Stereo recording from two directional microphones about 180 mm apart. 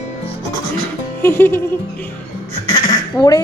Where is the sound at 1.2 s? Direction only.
10° left (ahead or behind).